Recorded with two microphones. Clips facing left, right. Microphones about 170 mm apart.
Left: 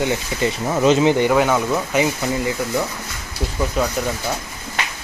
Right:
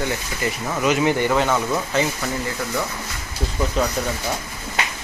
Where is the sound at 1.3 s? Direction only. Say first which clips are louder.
Left 3 dB; 10° left (ahead or behind).